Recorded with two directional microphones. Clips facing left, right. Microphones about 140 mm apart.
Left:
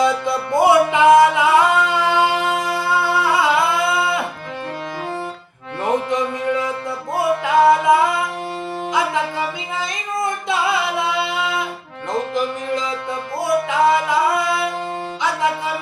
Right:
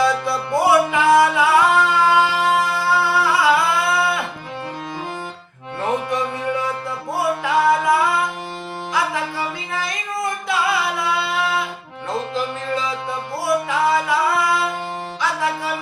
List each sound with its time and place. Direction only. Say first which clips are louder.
0.0 s music: left 1 dB; 20° left (ahead or behind)
5.8 s music: left 2 dB; 20° left (ahead or behind)
7.4 s music: left 4 dB; 20° left (ahead or behind)
9.7 s singing: even; 20° left (ahead or behind)
13.4 s music: left 3 dB; 20° left (ahead or behind)